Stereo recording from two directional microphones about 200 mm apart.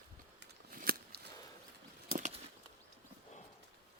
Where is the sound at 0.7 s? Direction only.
45° right (ahead or behind).